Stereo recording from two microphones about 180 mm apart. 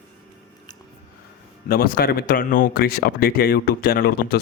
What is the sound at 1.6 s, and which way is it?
Speech, 55° left (ahead or behind).